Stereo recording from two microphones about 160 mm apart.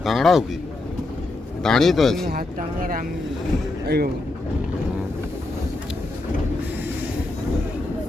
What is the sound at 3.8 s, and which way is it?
Speech, 85° right.